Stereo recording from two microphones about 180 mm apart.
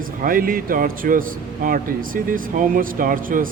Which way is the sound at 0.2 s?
50° right (ahead or behind).